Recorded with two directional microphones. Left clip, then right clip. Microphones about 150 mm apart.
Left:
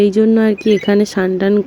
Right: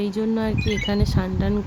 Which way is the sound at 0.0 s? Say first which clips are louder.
Left 13 dB; 45° left (ahead or behind).